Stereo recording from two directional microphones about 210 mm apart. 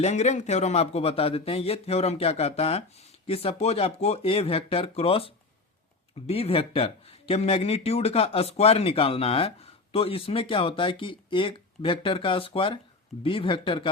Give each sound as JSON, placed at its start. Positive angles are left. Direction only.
{"t": 0.0, "sound": "speech", "side_deg": 35}